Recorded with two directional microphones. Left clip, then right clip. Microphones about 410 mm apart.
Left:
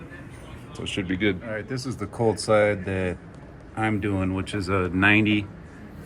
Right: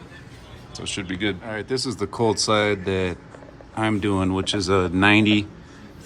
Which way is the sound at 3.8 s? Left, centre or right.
Centre.